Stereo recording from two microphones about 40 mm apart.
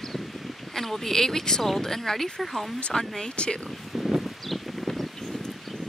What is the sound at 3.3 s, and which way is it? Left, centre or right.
Speech, left.